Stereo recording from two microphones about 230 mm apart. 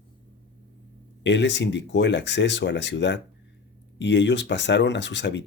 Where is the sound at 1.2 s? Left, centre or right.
Left.